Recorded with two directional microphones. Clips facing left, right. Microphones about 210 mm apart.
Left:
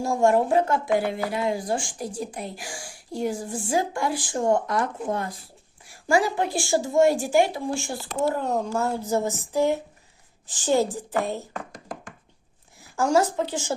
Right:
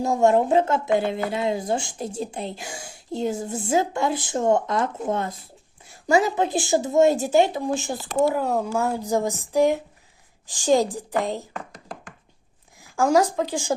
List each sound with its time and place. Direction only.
0.0 s a woman's voice: 20° right (ahead or behind)
8.4 s speech: 10° right (ahead or behind)
13.0 s speech: 15° right (ahead or behind)